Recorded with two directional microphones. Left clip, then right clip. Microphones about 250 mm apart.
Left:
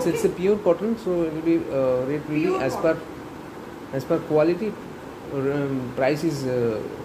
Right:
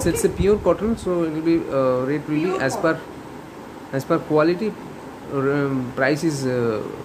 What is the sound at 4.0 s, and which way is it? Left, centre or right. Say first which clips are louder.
Speech: right 2 dB; centre.